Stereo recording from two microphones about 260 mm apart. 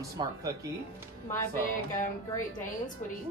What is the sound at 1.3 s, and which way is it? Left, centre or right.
Speech, centre.